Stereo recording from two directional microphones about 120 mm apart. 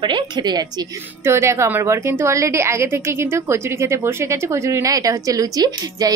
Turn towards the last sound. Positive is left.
turn(degrees=-30)  # may be behind; listen again after turning